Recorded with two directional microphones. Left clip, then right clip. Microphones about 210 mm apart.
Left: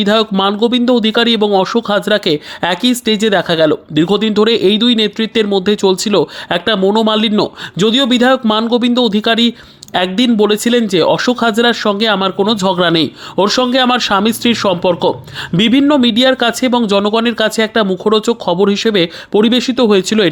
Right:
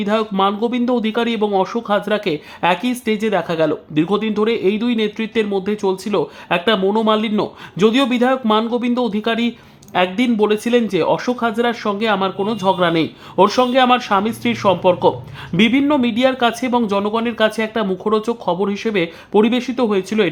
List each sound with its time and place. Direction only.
0.0 s speech: 25° left (ahead or behind)